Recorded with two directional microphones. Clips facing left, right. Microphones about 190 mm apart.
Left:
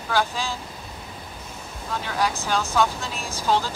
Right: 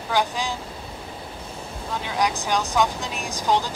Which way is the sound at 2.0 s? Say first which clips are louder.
Right 1 dB; 15° right (ahead or behind).